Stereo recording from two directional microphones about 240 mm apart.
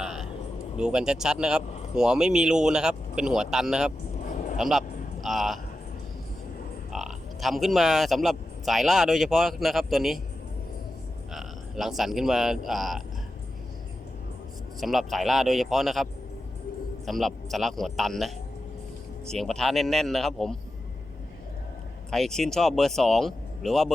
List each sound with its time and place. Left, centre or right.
0.0 s a sound: centre
0.8 s speech: centre
4.2 s a sound: left
4.5 s speech: centre
6.9 s speech: centre
11.3 s speech: centre
14.8 s speech: centre
17.1 s speech: centre
19.3 s speech: centre
22.1 s speech: centre